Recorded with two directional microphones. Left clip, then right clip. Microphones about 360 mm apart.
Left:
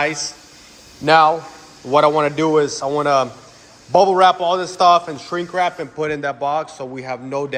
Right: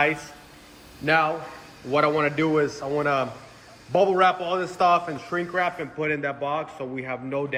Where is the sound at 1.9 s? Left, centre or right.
Centre.